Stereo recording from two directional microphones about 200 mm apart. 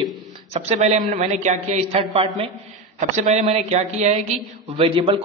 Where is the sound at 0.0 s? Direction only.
30° right (ahead or behind).